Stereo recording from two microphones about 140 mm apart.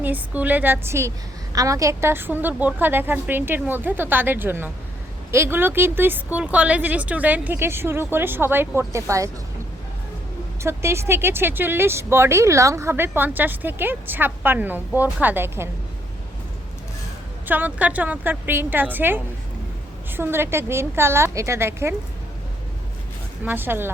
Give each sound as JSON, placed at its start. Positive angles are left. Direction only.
{"t": 0.0, "sound": "speech", "side_deg": -10}
{"t": 10.6, "sound": "speech", "side_deg": -20}
{"t": 17.4, "sound": "speech", "side_deg": -10}
{"t": 23.5, "sound": "speech", "side_deg": -15}